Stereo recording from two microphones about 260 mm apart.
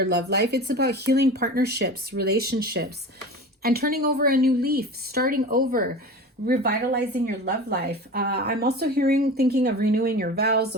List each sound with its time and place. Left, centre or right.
0.0 s a woman's voice: right